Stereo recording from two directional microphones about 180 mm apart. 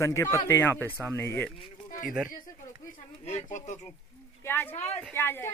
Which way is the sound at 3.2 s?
40° left (ahead or behind).